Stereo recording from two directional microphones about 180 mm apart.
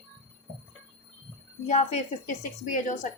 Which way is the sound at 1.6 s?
40° left (ahead or behind).